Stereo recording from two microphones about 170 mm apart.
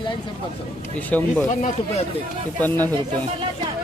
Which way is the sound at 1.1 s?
5° left (ahead or behind).